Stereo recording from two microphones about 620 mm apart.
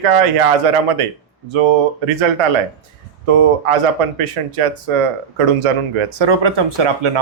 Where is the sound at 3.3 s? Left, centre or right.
Right.